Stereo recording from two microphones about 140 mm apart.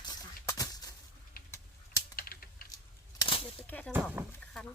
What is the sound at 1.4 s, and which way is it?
Typing, 90° left.